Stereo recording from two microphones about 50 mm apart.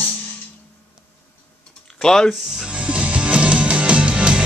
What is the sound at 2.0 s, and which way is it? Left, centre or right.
Speech, centre.